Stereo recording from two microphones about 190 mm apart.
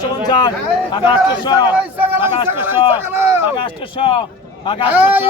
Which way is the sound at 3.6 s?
25° left (ahead or behind).